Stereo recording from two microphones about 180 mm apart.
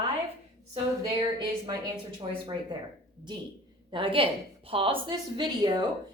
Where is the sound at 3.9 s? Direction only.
30° right (ahead or behind).